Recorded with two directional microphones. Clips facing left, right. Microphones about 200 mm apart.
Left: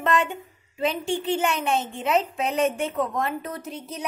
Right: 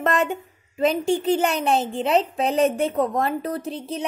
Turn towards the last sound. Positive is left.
turn(degrees=-30)  # may be behind; listen again after turning